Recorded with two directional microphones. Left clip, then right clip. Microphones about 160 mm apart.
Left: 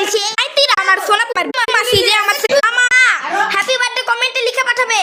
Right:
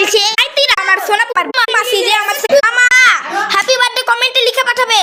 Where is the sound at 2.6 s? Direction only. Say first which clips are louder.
Right 4 dB; 10° right (ahead or behind).